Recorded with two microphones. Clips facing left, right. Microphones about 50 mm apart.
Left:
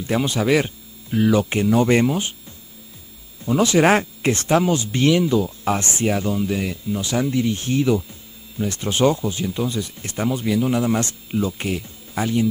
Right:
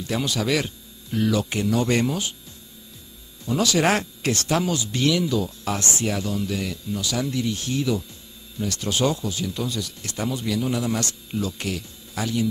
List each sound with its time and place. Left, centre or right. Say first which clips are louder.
0.0 s speech: left 4 dB; left
3.4 s speech: left 5 dB; left